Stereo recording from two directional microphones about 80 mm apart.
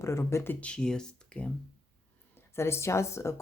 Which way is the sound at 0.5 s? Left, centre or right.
Centre.